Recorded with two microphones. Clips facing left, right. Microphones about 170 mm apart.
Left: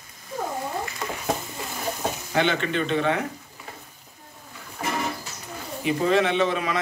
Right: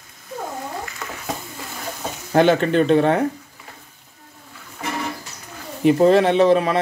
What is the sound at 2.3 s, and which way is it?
Speech, 40° right (ahead or behind).